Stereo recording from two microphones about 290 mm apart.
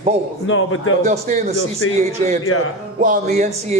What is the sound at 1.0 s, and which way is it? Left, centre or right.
A man's voice, right.